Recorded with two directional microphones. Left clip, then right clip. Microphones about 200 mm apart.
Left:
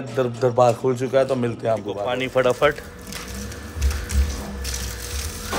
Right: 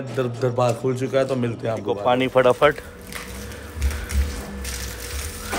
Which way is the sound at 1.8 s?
15° right (ahead or behind).